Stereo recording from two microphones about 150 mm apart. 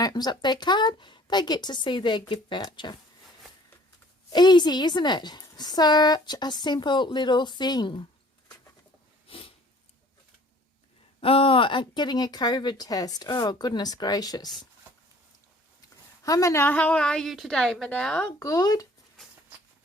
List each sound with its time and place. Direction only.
0.0 s a woman's voice: 25° left (ahead or behind)
4.3 s a woman's voice: 30° left (ahead or behind)
9.2 s a sound: 40° left (ahead or behind)
11.2 s a woman's voice: 40° left (ahead or behind)
15.8 s a woman's voice: 25° left (ahead or behind); by 18.3 s 5° left (ahead or behind)
18.3 s a woman's voice: 25° left (ahead or behind)